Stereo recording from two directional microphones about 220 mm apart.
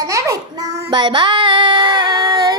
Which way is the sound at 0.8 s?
20° right (ahead or behind).